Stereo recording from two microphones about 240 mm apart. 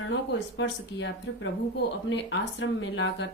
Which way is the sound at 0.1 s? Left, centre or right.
Left.